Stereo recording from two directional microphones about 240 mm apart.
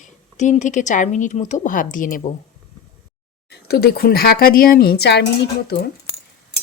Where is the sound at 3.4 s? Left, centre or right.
Left.